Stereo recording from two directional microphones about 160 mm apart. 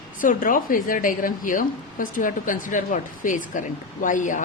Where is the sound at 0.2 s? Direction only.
55° left (ahead or behind).